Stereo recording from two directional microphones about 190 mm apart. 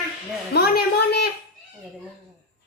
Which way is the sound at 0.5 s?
55° left (ahead or behind).